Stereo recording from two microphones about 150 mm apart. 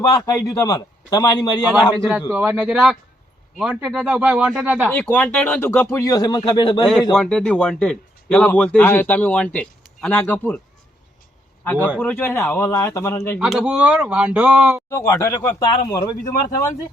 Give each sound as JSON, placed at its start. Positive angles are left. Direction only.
{"t": 0.3, "sound": "a man's voice", "side_deg": 25}
{"t": 2.0, "sound": "speech", "side_deg": -10}
{"t": 4.9, "sound": "speech", "side_deg": 10}
{"t": 7.2, "sound": "speech", "side_deg": 5}
{"t": 11.8, "sound": "speech", "side_deg": -10}
{"t": 12.0, "sound": "speech", "side_deg": 15}
{"t": 13.4, "sound": "speech", "side_deg": -5}
{"t": 14.8, "sound": "a man's voice", "side_deg": 20}